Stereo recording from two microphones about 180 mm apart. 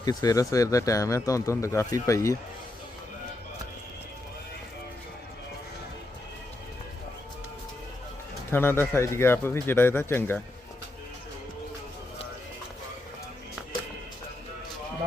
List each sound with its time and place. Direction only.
0.0 s speech: 20° left (ahead or behind)
8.4 s speech: 10° left (ahead or behind)